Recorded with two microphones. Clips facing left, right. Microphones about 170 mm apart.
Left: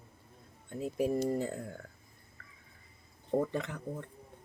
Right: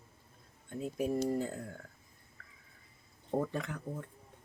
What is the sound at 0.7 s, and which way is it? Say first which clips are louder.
Speech: left 2 dB; 5° left (ahead or behind).